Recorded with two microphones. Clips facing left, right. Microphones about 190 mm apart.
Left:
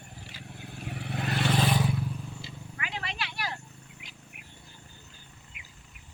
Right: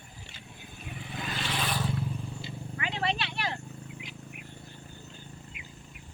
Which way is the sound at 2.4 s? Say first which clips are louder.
Right 5 dB; 30° right (ahead or behind).